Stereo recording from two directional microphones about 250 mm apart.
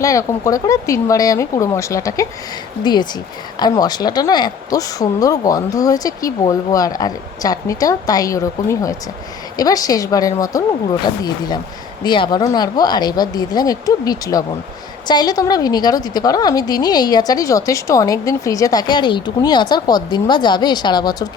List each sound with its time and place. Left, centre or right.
0.0 s a woman's voice: centre